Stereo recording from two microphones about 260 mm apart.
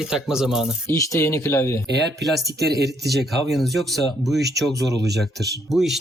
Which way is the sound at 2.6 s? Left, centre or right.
Right.